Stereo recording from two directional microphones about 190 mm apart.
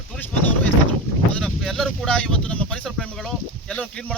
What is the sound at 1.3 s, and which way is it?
Speech, centre (ahead or behind).